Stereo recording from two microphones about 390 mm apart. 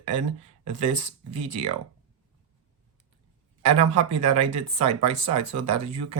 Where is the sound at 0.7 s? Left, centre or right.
Centre.